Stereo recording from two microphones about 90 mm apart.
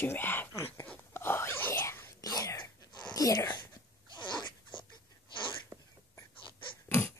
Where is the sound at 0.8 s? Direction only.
25° left (ahead or behind).